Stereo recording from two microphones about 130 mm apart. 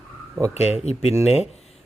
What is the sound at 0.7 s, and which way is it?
Speech, 55° left (ahead or behind).